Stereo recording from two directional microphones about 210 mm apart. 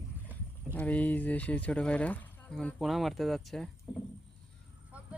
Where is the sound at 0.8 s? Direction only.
5° left (ahead or behind).